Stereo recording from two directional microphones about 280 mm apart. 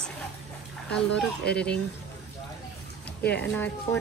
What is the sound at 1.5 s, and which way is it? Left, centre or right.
Speech, centre.